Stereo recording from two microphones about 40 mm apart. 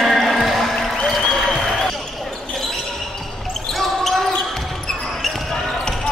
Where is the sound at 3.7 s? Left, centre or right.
Centre.